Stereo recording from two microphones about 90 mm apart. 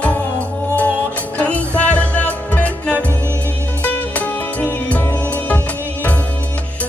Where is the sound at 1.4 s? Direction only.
15° left (ahead or behind).